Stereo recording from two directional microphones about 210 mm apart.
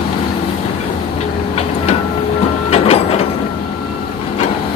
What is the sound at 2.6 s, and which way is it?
Printer, 30° left (ahead or behind).